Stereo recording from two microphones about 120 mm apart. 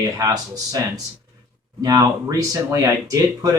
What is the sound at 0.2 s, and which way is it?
Speech, 30° right (ahead or behind).